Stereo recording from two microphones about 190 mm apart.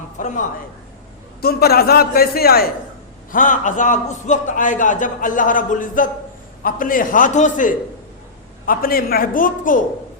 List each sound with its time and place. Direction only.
0.2 s a man's voice: 40° left (ahead or behind)
1.4 s a man's voice: 55° left (ahead or behind)
3.3 s a man's voice: 45° left (ahead or behind)